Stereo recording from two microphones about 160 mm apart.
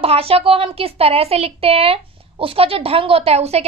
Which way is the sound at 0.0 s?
35° right (ahead or behind).